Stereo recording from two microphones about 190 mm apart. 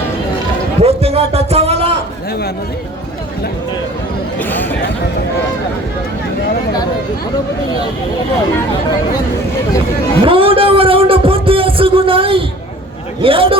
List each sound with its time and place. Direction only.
0.8 s a sound: 30° right (ahead or behind)
4.4 s speech: 10° left (ahead or behind)
10.2 s music: 30° right (ahead or behind)
13.2 s a man's voice: 30° right (ahead or behind)